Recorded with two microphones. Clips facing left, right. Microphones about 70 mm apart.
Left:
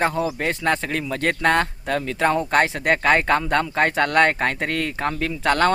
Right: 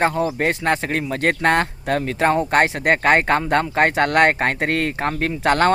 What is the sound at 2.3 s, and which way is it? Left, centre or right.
Speech, centre.